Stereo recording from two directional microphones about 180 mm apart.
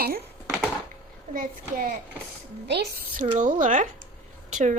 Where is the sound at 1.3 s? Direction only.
50° right (ahead or behind).